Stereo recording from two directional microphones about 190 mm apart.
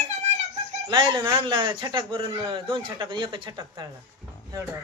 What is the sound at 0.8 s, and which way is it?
A man's voice, 25° right (ahead or behind).